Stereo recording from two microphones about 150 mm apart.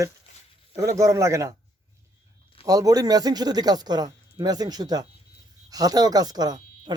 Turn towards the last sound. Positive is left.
turn(degrees=-25)  # may be behind; listen again after turning